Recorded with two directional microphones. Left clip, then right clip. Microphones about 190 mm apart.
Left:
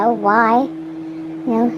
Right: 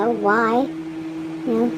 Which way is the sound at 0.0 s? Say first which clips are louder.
Left 4 dB; 25° left (ahead or behind).